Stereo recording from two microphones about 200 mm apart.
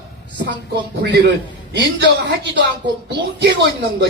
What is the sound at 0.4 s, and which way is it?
Speech, 55° right (ahead or behind).